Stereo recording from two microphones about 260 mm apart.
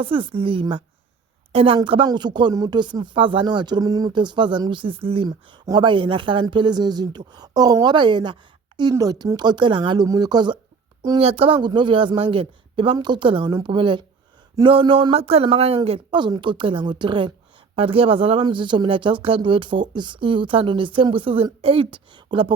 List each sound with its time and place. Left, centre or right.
0.0 s speech: centre